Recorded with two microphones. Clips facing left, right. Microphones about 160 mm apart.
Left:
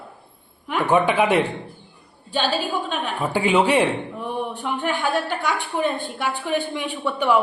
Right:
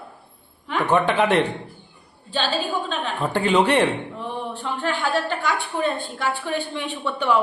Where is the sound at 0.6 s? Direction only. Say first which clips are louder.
Left 1 dB; 10° left (ahead or behind).